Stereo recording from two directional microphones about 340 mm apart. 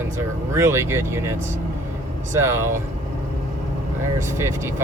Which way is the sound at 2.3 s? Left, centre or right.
Centre.